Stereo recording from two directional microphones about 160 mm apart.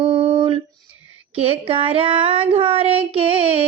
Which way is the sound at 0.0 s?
35° right (ahead or behind).